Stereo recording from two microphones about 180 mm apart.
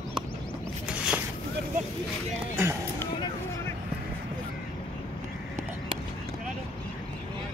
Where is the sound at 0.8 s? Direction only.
5° right (ahead or behind).